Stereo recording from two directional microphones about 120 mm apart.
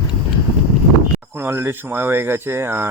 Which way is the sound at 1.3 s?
20° right (ahead or behind).